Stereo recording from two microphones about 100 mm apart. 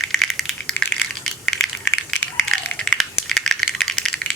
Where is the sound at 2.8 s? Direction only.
5° left (ahead or behind).